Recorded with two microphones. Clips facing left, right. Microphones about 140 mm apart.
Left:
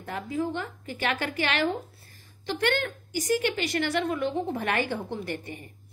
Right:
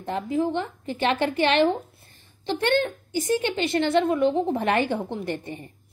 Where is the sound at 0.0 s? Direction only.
25° right (ahead or behind).